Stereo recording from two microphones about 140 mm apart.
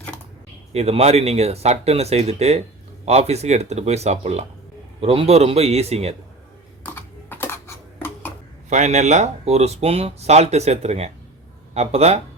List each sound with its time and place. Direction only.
0.7 s speech: 50° right (ahead or behind)
6.8 s a sound: 15° left (ahead or behind)
8.7 s speech: 55° right (ahead or behind)